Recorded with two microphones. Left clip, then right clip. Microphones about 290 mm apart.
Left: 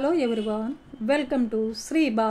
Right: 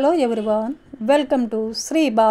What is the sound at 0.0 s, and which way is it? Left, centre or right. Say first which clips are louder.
A woman's voice: right 6 dB; right.